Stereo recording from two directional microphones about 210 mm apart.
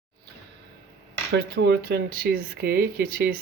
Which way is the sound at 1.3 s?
55° right (ahead or behind).